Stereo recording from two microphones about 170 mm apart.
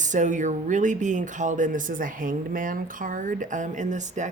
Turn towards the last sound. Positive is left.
turn(degrees=-45)  # may be behind; listen again after turning